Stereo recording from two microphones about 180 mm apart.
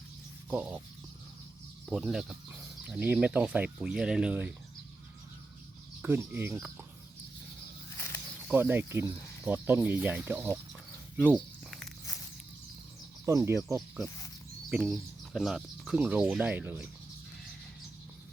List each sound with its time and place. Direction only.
0.5 s speech: 5° right (ahead or behind)
1.9 s speech: 5° right (ahead or behind)
6.0 s speech: 10° right (ahead or behind)
7.9 s snake: 15° left (ahead or behind)
8.5 s speech: 10° right (ahead or behind)
13.2 s speech: 15° right (ahead or behind)
14.7 s speech: centre (ahead or behind)